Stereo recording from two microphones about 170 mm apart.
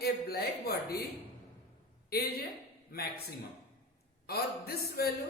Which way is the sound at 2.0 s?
65° left (ahead or behind).